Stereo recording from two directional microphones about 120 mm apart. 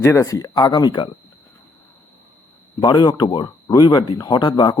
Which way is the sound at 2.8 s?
35° left (ahead or behind).